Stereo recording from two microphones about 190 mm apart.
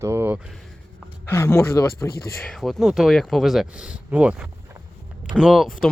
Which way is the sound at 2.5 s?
Centre (ahead or behind).